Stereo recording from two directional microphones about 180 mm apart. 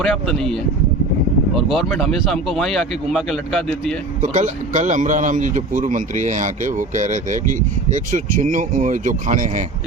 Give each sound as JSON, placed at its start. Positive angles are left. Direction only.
{"t": 0.0, "sound": "speech", "side_deg": 0}
{"t": 1.5, "sound": "speech", "side_deg": 0}
{"t": 4.2, "sound": "speech", "side_deg": -45}